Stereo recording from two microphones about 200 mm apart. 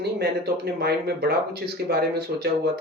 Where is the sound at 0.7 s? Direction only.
50° right (ahead or behind).